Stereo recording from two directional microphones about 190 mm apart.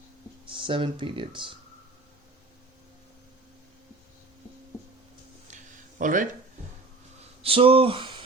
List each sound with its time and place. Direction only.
0.4 s speech: 25° right (ahead or behind)
5.5 s a sound: 40° right (ahead or behind)
7.4 s speech: 30° right (ahead or behind)